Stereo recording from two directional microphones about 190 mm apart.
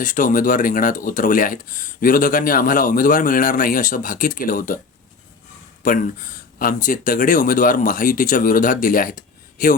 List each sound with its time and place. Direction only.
0.0 s speech: 45° left (ahead or behind)
5.8 s speech: 45° left (ahead or behind)